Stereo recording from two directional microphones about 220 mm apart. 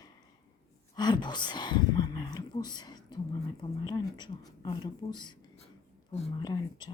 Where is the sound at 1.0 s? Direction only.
20° left (ahead or behind).